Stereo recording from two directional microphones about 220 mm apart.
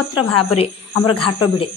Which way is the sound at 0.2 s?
25° left (ahead or behind).